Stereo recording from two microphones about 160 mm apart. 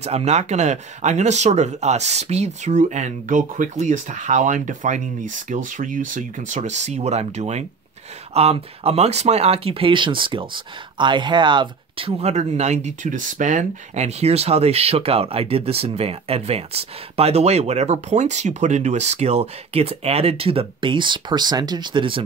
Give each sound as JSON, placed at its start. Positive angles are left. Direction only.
{"t": 0.0, "sound": "speech", "side_deg": -40}
{"t": 12.2, "sound": "speech", "side_deg": -45}